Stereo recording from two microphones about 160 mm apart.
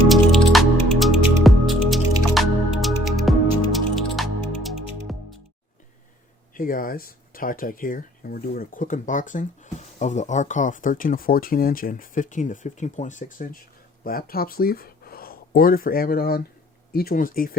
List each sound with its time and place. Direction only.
0.1 s music: centre (ahead or behind)
6.5 s speech: 60° left (ahead or behind)